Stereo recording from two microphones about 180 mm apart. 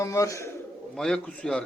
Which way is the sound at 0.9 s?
5° left (ahead or behind).